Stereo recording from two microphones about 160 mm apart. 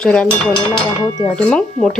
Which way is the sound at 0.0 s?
5° left (ahead or behind).